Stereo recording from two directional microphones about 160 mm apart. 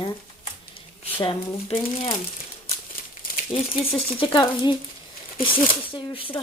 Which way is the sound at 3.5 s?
35° left (ahead or behind).